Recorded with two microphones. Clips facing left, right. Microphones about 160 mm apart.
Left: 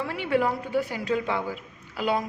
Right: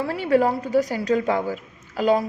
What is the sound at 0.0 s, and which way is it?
A woman's voice, 40° right (ahead or behind).